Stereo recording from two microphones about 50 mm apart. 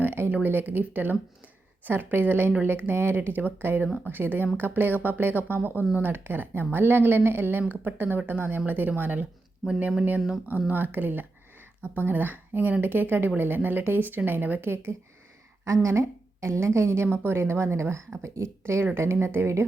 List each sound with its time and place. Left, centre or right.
0.0 s a sound: right
0.4 s a woman's voice: right
9.6 s speech: centre
10.7 s a woman's voice: right
15.6 s a woman's voice: right
16.5 s a woman's voice: right